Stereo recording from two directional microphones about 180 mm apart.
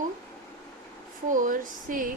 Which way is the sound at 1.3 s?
50° right (ahead or behind).